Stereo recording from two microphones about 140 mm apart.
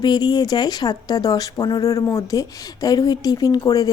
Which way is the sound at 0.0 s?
30° left (ahead or behind).